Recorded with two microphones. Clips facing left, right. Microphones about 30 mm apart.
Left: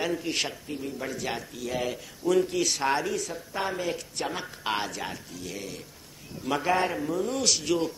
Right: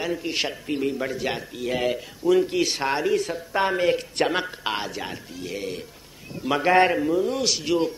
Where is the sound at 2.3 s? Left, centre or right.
Right.